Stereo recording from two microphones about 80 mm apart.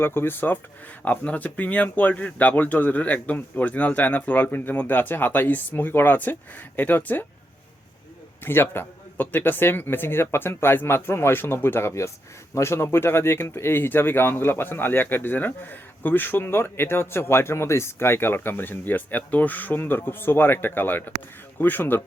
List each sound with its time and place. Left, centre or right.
0.0 s speech: left
8.4 s speech: left